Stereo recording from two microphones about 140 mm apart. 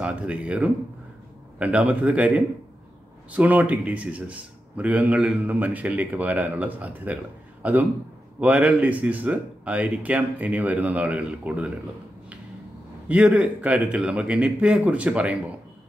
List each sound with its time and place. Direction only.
0.0 s speech: 10° right (ahead or behind)
13.1 s speech: 10° right (ahead or behind)